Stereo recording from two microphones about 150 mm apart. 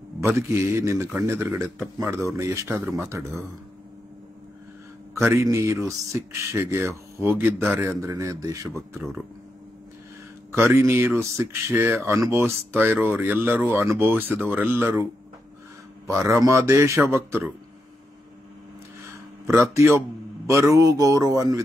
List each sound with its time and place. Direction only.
0.4 s speech: 15° right (ahead or behind)
5.1 s speech: 20° right (ahead or behind)
10.5 s speech: 15° right (ahead or behind)
16.1 s speech: 20° right (ahead or behind)
19.4 s speech: 20° right (ahead or behind)